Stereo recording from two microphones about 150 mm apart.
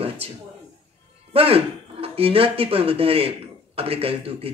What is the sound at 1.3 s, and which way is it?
Speech, 40° right (ahead or behind).